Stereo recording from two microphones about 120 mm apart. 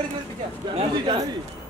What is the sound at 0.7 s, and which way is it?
Speech, 40° right (ahead or behind).